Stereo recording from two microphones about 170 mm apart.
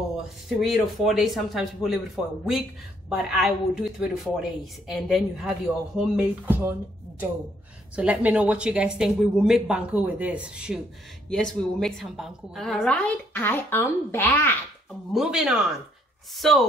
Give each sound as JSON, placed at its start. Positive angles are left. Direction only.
{"t": 0.6, "sound": "a woman's voice", "side_deg": 0}
{"t": 15.1, "sound": "speech", "side_deg": -5}